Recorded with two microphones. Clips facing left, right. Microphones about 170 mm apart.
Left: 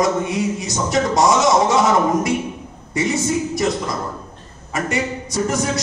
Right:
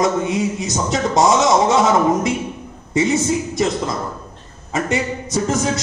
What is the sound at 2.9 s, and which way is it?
Speech, 25° right (ahead or behind).